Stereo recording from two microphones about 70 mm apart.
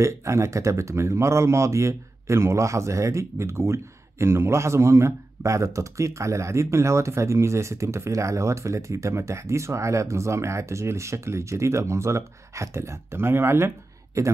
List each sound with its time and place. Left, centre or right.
0.0 s speech: right
14.2 s speech: right